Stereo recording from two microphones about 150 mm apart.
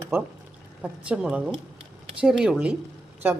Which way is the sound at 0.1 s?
15° right (ahead or behind).